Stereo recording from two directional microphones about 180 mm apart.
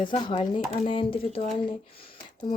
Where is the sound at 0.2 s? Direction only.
25° left (ahead or behind).